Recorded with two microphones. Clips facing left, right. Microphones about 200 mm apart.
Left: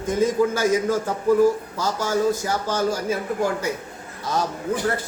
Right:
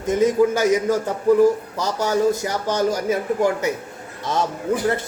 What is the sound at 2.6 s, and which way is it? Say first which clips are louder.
Speech: right 4 dB; 15° right (ahead or behind).